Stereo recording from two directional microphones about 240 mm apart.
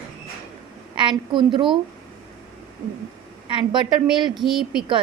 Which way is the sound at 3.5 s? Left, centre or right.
Centre.